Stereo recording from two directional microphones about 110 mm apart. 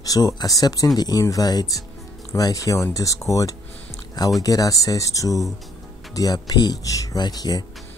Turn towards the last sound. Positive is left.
turn(degrees=35)  # may be behind; listen again after turning